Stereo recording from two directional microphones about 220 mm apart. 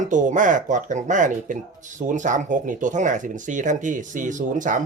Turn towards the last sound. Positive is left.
turn(degrees=-35)  # may be behind; listen again after turning